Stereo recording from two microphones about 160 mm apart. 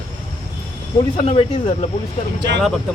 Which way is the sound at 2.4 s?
90° right.